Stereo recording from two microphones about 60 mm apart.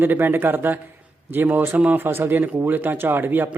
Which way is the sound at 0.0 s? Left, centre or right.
Right.